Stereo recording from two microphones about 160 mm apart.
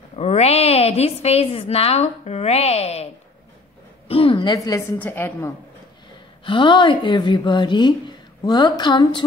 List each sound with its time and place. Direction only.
0.1 s a woman's voice: 40° left (ahead or behind)
4.1 s a woman's voice: 35° left (ahead or behind); by 5.5 s 15° left (ahead or behind)
6.4 s a woman's voice: 30° left (ahead or behind)